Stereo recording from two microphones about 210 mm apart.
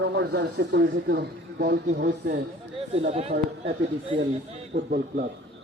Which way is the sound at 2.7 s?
30° right (ahead or behind).